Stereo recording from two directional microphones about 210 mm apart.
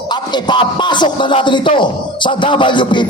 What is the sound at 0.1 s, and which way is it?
A man's voice, 20° left (ahead or behind).